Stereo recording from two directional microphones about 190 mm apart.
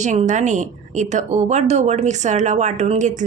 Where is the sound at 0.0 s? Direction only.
40° right (ahead or behind).